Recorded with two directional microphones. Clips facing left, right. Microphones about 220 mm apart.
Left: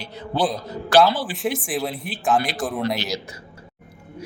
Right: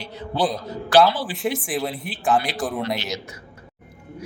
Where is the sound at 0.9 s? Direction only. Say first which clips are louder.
Even; centre (ahead or behind).